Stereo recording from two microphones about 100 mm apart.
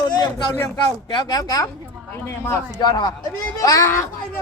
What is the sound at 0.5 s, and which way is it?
Speech, 30° left (ahead or behind).